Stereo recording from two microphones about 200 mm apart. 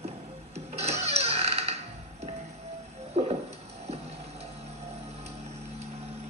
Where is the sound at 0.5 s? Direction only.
35° right (ahead or behind).